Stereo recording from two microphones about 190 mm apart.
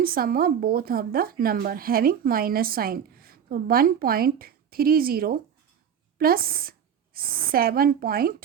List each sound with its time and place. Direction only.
0.0 s a woman's voice: 50° right (ahead or behind)